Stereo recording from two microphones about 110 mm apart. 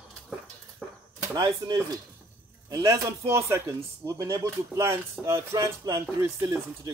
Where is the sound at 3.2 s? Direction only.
25° right (ahead or behind).